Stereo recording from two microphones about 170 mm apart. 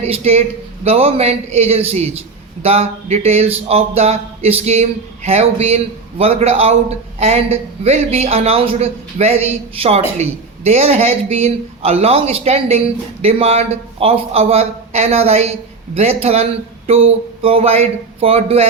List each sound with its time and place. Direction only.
0.0 s a man's voice: 40° right (ahead or behind)